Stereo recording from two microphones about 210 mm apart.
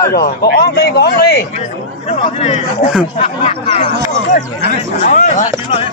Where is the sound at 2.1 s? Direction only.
30° left (ahead or behind).